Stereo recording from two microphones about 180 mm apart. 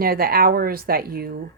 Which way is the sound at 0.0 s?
55° right (ahead or behind).